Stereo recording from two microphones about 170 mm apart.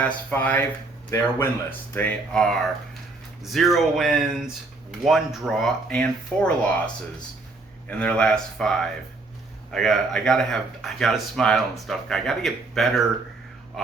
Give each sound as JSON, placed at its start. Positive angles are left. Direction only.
{"t": 0.0, "sound": "speech", "side_deg": 10}